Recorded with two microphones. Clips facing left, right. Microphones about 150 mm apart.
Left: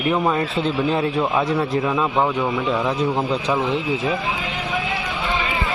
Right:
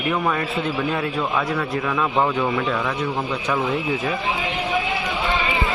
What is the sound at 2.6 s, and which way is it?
A man's voice, 20° left (ahead or behind).